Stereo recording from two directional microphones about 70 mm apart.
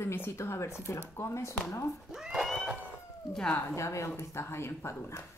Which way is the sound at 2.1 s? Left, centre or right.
Centre.